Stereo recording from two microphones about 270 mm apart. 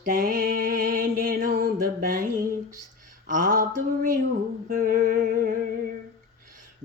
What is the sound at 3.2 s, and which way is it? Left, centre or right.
Mantra, right.